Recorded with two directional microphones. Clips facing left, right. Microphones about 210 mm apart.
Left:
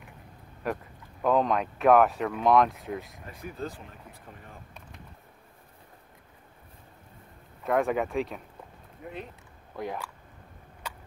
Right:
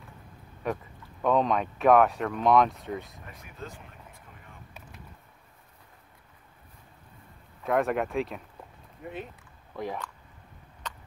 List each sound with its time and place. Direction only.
0.6 s speech: centre (ahead or behind)
3.5 s speech: 35° left (ahead or behind)
7.6 s speech: centre (ahead or behind)
10.8 s a sound: 10° left (ahead or behind)